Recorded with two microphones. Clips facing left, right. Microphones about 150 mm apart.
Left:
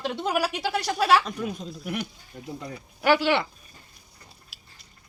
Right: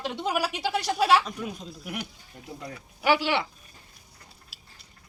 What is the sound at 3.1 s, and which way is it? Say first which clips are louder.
Speech: left 3 dB; 5° right (ahead or behind).